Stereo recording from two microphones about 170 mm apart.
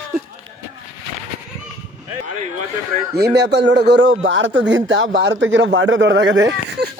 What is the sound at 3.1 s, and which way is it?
Speech, 80° right.